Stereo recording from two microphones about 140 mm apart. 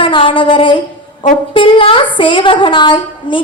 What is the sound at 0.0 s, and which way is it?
A woman's voice, 40° left (ahead or behind).